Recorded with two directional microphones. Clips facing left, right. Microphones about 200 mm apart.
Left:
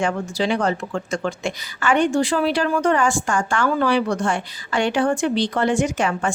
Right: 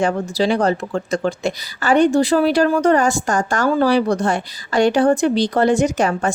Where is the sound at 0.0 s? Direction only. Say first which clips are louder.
Right 4 dB; 35° right (ahead or behind).